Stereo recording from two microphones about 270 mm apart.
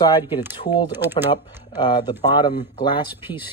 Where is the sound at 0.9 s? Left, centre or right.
Centre.